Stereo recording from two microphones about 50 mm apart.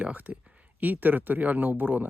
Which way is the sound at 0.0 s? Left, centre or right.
Right.